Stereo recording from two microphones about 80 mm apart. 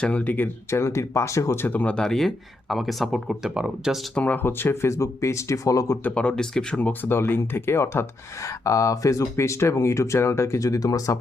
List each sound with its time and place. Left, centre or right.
0.0 s speech: centre
2.0 s speech: centre
4.1 s speech: centre; by 6.0 s left
6.0 s speech: centre; by 11.2 s left